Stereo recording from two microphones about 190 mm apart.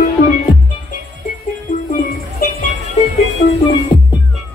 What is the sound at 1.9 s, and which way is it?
Music, 45° left (ahead or behind).